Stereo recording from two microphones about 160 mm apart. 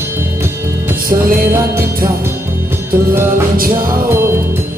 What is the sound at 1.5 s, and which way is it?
Music, 15° right (ahead or behind).